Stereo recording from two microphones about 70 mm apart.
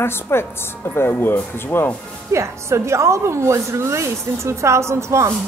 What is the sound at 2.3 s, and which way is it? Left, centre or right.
A woman's voice, right.